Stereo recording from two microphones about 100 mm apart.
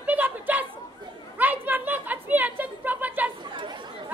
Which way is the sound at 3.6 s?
50° right (ahead or behind).